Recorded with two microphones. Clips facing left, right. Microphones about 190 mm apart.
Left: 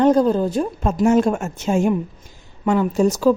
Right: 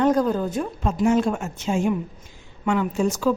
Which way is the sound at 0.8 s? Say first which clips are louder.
Left 4 dB; 45° left (ahead or behind).